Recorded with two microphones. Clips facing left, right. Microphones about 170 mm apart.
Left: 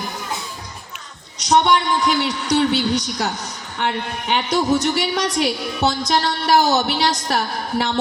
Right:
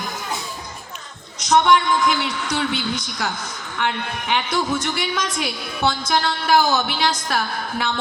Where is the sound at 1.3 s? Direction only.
35° left (ahead or behind).